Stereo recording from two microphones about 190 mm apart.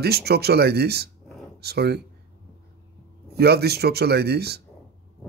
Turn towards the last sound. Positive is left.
turn(degrees=-60)  # may be behind; listen again after turning